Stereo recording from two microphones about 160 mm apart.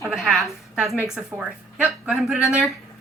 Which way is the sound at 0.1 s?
Centre (ahead or behind).